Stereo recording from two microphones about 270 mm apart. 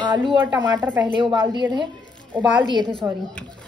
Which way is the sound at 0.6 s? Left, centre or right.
Centre.